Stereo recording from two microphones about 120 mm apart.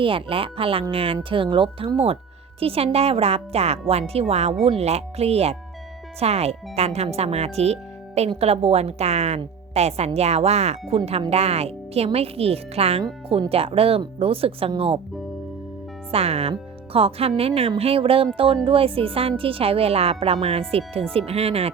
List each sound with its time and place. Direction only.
0.0 s speech: 50° right (ahead or behind)
16.1 s speech: 55° right (ahead or behind)